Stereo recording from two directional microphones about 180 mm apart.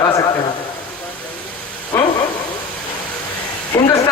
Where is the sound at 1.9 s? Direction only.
15° left (ahead or behind).